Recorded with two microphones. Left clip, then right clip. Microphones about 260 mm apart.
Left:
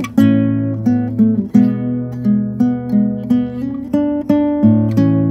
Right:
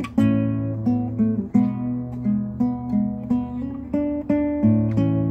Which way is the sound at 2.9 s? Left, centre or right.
Left.